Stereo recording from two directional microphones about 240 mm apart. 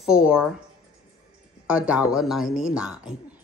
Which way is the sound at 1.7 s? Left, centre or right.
Centre.